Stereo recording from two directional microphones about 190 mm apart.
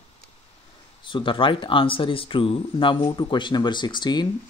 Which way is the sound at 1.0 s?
25° left (ahead or behind).